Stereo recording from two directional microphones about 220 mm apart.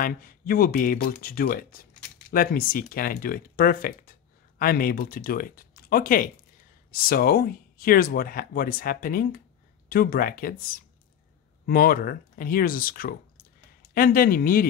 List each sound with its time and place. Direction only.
0.0 s speech: 40° left (ahead or behind)
11.6 s speech: 40° left (ahead or behind)